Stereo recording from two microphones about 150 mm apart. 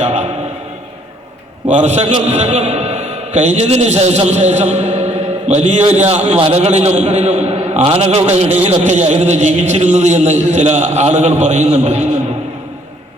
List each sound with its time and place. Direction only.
0.0 s a man's voice: 45° right (ahead or behind)
1.7 s a man's voice: 50° right (ahead or behind)